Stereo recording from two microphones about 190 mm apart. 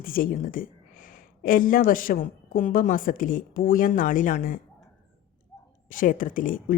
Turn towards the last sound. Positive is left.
turn(degrees=45)  # may be behind; listen again after turning